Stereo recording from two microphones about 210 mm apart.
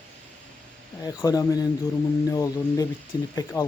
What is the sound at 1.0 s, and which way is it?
Speech, 15° left (ahead or behind).